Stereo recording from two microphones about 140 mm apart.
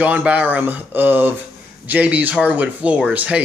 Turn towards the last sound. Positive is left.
turn(degrees=-10)  # may be behind; listen again after turning